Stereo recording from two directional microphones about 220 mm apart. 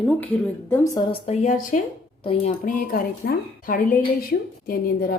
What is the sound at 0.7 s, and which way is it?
Speech, 15° left (ahead or behind).